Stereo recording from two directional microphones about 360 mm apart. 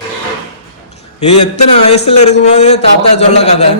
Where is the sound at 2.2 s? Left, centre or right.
Centre.